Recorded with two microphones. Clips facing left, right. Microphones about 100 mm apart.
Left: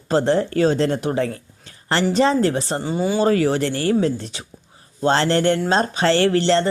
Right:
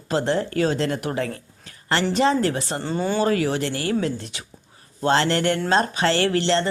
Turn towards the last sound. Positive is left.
turn(degrees=35)  # may be behind; listen again after turning